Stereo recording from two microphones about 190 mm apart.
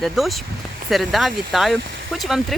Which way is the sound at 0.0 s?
Centre (ahead or behind).